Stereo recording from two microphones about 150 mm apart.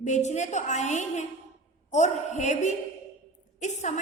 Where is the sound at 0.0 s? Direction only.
50° left (ahead or behind).